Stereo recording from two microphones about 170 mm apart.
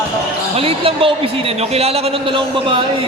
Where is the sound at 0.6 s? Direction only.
35° right (ahead or behind).